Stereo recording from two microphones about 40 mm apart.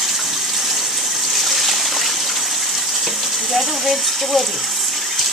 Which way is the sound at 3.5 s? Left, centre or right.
Centre.